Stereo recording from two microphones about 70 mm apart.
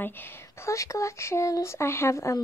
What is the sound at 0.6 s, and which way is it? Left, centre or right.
Speech, left.